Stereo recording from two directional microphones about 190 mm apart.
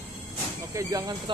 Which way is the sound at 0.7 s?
20° right (ahead or behind).